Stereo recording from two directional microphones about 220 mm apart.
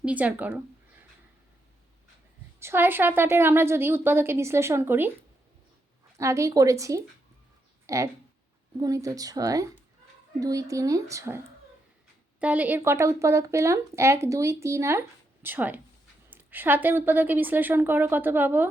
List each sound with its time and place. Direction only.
0.0 s a woman's voice: 5° right (ahead or behind)
2.6 s a woman's voice: 10° right (ahead or behind)
6.1 s a woman's voice: 15° right (ahead or behind)
12.4 s a woman's voice: 5° right (ahead or behind)